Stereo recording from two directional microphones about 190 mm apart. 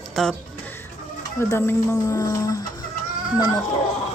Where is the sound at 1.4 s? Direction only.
10° left (ahead or behind).